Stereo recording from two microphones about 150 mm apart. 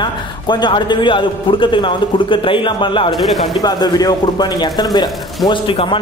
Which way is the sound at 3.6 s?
25° left (ahead or behind).